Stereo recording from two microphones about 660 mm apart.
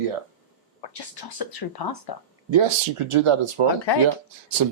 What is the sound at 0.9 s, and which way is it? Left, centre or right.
Speech, left.